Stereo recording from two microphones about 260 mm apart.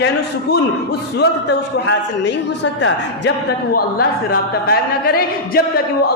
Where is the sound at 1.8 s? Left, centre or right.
Left.